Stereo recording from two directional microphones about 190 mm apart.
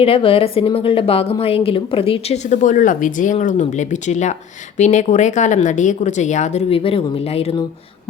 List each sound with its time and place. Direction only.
0.0 s a woman's voice: 30° left (ahead or behind)